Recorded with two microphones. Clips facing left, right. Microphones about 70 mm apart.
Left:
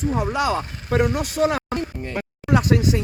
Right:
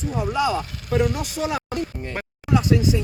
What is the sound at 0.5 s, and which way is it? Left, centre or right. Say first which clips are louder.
Speech: left 1 dB; left.